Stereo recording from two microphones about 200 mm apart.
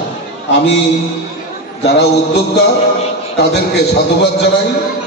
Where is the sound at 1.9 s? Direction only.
55° left (ahead or behind).